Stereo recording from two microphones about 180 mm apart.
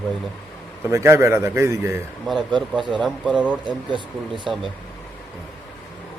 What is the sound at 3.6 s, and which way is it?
Speech, 25° right (ahead or behind).